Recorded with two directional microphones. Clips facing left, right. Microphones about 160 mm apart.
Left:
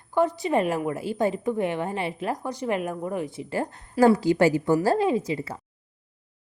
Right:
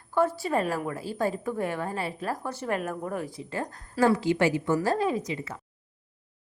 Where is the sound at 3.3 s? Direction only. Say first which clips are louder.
Left 5 dB; 30° left (ahead or behind).